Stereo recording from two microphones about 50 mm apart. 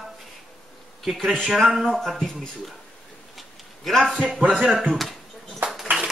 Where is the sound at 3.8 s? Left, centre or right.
Centre.